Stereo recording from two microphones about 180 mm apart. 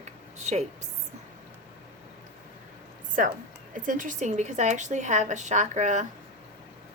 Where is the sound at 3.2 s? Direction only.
45° right (ahead or behind).